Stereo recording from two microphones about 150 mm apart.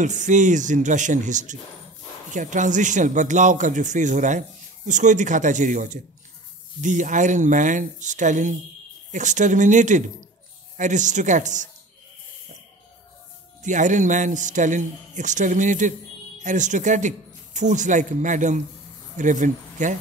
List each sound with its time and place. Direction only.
0.0 s a man's voice: 55° right (ahead or behind)
13.6 s a man's voice: 55° right (ahead or behind)